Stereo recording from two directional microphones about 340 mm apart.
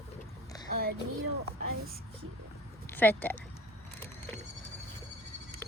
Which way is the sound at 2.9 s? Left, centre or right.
Centre.